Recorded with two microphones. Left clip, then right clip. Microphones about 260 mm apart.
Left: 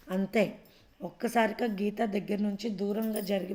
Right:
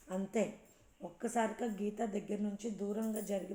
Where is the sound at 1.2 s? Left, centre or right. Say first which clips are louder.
Left 8 dB; left.